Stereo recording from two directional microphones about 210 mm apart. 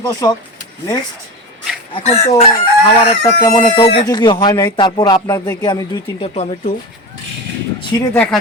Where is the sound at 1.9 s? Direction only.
30° left (ahead or behind).